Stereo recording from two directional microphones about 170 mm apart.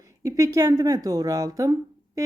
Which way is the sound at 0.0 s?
20° right (ahead or behind).